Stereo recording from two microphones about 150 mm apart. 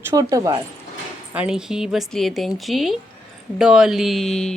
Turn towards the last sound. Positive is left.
turn(degrees=5)  # may be behind; listen again after turning